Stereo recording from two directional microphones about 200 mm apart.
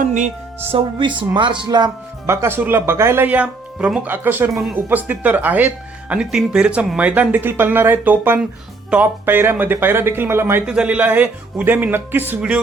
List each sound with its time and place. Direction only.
0.0 s music: 40° right (ahead or behind)
0.7 s speech: 25° right (ahead or behind); by 12.5 s 10° right (ahead or behind)